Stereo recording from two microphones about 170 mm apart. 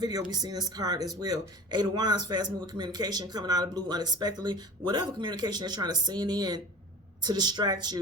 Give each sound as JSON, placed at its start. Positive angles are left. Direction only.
{"t": 0.0, "sound": "speech", "side_deg": -25}